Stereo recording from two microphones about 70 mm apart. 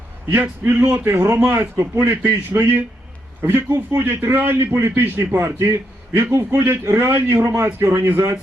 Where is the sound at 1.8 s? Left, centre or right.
Right.